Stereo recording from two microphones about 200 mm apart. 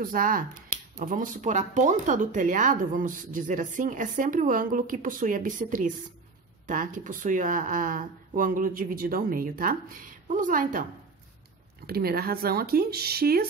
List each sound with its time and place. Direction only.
0.0 s speech: 45° right (ahead or behind)